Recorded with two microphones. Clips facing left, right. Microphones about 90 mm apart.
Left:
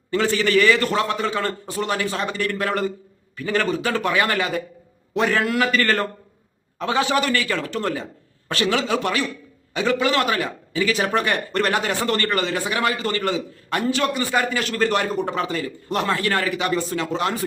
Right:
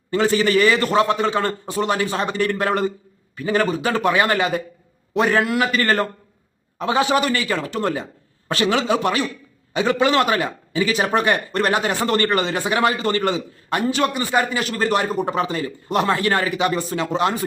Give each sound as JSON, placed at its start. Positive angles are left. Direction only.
{"t": 0.1, "sound": "a man's voice", "side_deg": -20}